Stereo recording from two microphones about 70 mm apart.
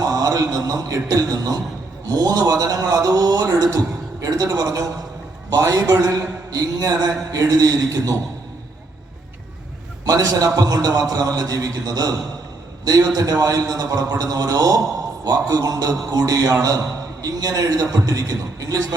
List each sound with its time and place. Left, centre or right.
0.0 s a sound: right
2.0 s a man's voice: right
10.1 s a man's voice: right
15.2 s a man's voice: right